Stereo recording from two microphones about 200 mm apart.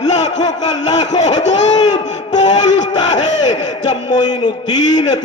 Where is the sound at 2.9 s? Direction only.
20° left (ahead or behind).